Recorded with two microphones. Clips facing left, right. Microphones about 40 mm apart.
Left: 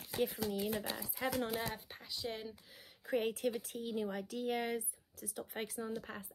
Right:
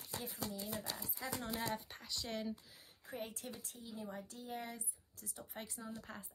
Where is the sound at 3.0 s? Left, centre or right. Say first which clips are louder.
Left 12 dB; left.